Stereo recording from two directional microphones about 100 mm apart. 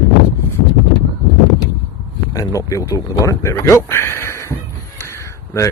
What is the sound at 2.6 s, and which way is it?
Speech, 35° left (ahead or behind).